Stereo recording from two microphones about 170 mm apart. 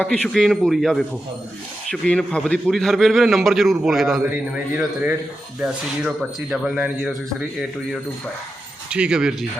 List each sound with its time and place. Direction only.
0.0 s a man's voice: 5° left (ahead or behind)
8.9 s a man's voice: 5° right (ahead or behind)